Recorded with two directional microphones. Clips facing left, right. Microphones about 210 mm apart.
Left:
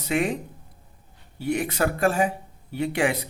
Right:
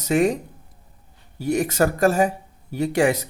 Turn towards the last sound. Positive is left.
turn(degrees=-45)  # may be behind; listen again after turning